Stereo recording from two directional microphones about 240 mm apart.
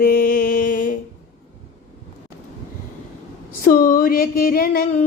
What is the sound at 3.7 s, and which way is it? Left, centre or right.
Music, left.